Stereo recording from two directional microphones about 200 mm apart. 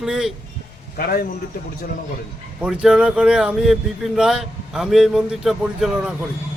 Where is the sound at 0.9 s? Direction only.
50° left (ahead or behind).